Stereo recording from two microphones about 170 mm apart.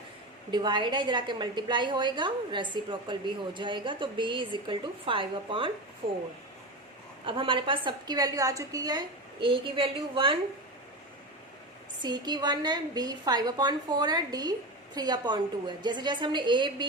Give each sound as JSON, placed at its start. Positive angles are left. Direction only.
{"t": 0.5, "sound": "a woman's voice", "side_deg": -25}
{"t": 7.3, "sound": "a woman's voice", "side_deg": -30}
{"t": 12.0, "sound": "a woman's voice", "side_deg": -25}